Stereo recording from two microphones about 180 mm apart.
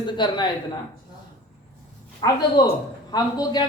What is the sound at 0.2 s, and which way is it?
Speech, 25° left (ahead or behind).